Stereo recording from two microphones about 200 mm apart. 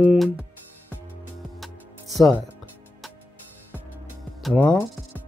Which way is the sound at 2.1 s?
Centre (ahead or behind).